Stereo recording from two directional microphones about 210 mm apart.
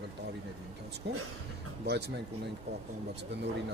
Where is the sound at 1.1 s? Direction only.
50° right (ahead or behind).